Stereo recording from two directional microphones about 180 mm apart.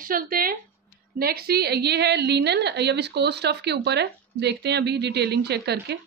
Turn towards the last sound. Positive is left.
turn(degrees=-65)  # may be behind; listen again after turning